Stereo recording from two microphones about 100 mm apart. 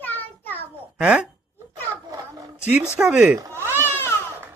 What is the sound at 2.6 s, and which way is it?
Speech, 15° right (ahead or behind).